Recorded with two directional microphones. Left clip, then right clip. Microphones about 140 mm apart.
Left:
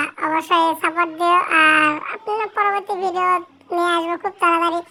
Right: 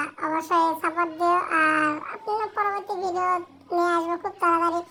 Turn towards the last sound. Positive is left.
turn(degrees=65)  # may be behind; listen again after turning